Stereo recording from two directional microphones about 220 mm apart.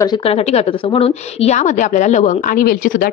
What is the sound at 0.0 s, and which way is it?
A woman's voice, 20° left (ahead or behind).